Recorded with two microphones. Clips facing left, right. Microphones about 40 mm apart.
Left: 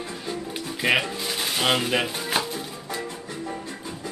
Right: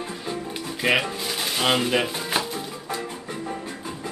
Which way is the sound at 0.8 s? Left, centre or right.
Centre.